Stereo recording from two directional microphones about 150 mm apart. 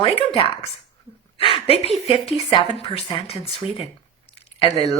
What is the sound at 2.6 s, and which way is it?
A woman's voice, 40° left (ahead or behind).